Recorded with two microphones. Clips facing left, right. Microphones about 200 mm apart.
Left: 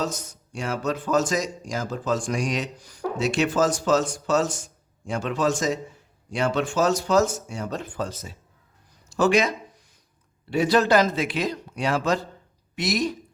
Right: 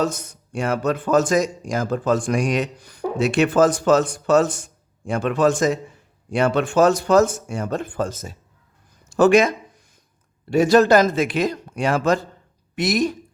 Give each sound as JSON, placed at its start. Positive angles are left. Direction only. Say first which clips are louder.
{"t": 0.0, "sound": "a man's voice", "louder": "right 6 dB", "side_deg": -55}
{"t": 10.5, "sound": "a man's voice", "louder": "right 5 dB", "side_deg": -45}